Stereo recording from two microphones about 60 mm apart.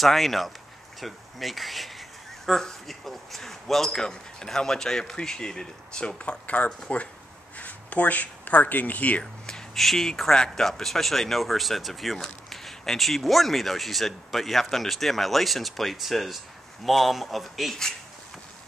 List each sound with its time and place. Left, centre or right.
0.0 s speech: centre; by 9.2 s left
9.2 s speech: centre